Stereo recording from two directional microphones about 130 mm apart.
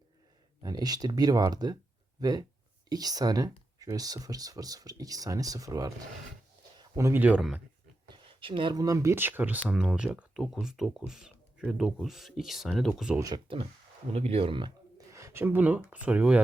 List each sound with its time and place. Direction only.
0.6 s speech: 30° right (ahead or behind)
6.9 s speech: 25° right (ahead or behind)
7.2 s speech: 10° right (ahead or behind)
8.0 s a sound: 40° right (ahead or behind)
8.7 s speech: 25° right (ahead or behind); by 12.9 s centre (ahead or behind)
13.1 s speech: 25° right (ahead or behind)
14.1 s speech: 50° right (ahead or behind)
15.1 s speech: 20° right (ahead or behind)